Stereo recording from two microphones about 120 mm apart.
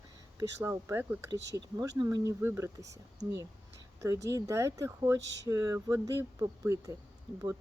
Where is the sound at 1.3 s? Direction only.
30° right (ahead or behind).